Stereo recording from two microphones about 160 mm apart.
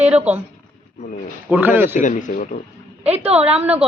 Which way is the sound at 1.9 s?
50° left (ahead or behind).